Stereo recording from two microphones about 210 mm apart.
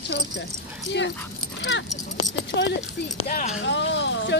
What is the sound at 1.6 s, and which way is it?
Speech, 60° left (ahead or behind).